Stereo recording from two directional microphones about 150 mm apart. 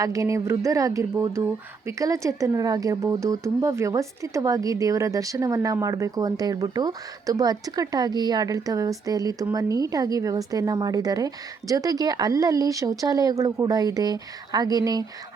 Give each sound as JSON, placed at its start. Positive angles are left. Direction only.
{"t": 0.0, "sound": "a woman's voice", "side_deg": -20}